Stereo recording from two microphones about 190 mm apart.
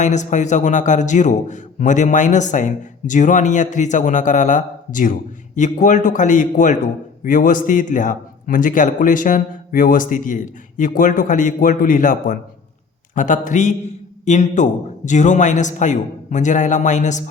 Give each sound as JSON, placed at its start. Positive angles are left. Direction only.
{"t": 0.0, "sound": "a man's voice", "side_deg": 40}